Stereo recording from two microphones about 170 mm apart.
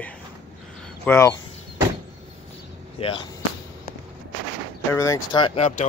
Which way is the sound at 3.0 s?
35° left (ahead or behind).